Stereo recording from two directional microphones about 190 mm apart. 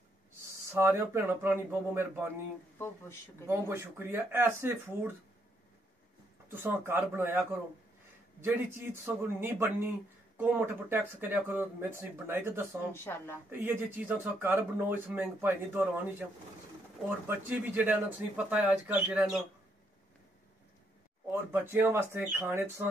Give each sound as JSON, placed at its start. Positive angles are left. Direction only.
{"t": 0.7, "sound": "speech", "side_deg": -15}
{"t": 2.8, "sound": "speech", "side_deg": 15}
{"t": 3.4, "sound": "speech", "side_deg": -15}
{"t": 6.5, "sound": "speech", "side_deg": -10}
{"t": 12.9, "sound": "speech", "side_deg": 10}
{"t": 13.5, "sound": "speech", "side_deg": -10}
{"t": 17.3, "sound": "speech", "side_deg": -10}
{"t": 21.3, "sound": "speech", "side_deg": -10}